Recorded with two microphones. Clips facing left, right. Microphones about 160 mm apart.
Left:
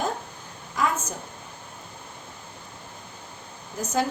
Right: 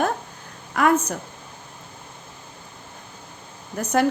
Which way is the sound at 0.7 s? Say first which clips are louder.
Right 7 dB; 65° right (ahead or behind).